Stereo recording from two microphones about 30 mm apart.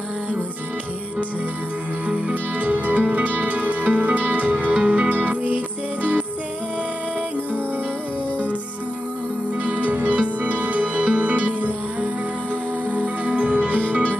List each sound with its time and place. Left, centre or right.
2.5 s music: right
9.8 s music: right